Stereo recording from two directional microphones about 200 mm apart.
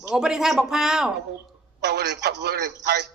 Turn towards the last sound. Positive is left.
turn(degrees=-55)  # may be behind; listen again after turning